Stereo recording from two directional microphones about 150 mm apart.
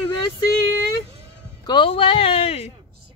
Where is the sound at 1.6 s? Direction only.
35° left (ahead or behind).